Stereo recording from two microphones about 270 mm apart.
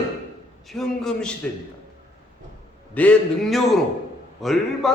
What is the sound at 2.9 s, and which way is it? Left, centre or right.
A man's voice, centre.